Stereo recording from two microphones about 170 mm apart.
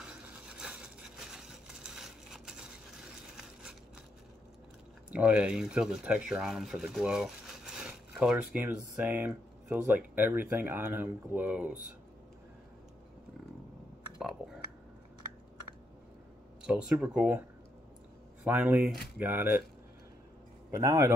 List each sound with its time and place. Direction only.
0.6 s a sound: 5° right (ahead or behind)
5.1 s speech: 10° right (ahead or behind)
16.6 s speech: 5° right (ahead or behind)
18.4 s speech: 10° right (ahead or behind)
20.7 s a man's voice: 20° right (ahead or behind)